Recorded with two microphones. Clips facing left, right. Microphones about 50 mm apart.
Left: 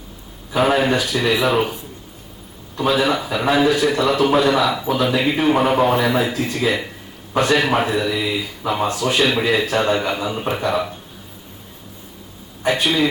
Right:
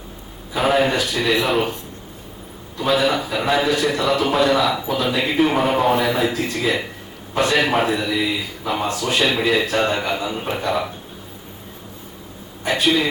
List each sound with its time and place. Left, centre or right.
0.6 s a man's voice: centre
2.8 s a man's voice: centre
9.0 s a man's voice: left
9.2 s a man's voice: centre
12.6 s a man's voice: centre